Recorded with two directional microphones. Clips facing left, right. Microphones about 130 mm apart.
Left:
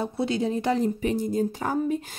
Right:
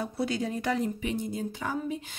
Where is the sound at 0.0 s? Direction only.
25° left (ahead or behind).